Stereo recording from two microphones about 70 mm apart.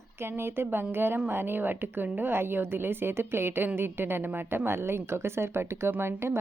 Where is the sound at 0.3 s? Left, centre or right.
Right.